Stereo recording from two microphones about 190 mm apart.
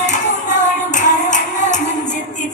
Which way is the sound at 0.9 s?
40° left (ahead or behind).